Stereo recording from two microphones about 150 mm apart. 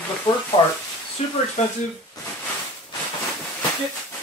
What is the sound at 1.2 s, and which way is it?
Speech, 45° left (ahead or behind).